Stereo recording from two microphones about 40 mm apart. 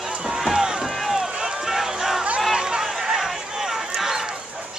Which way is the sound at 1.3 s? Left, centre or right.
Centre.